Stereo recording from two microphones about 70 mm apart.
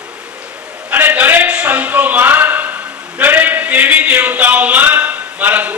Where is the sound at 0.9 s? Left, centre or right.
Right.